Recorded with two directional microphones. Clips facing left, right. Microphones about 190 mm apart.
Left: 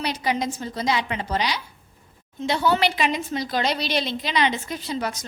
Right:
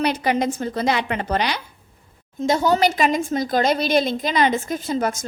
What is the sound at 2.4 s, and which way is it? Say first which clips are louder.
A woman's voice: right 4 dB; 45° right (ahead or behind).